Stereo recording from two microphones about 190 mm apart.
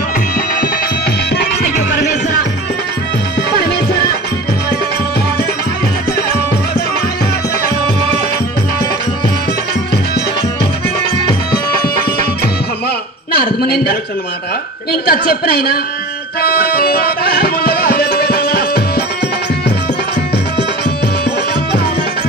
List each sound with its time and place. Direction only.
13.3 s a sound: 55° left (ahead or behind)
14.9 s a woman's voice: 55° left (ahead or behind)
16.3 s music: 55° left (ahead or behind)
20.5 s music: 60° left (ahead or behind)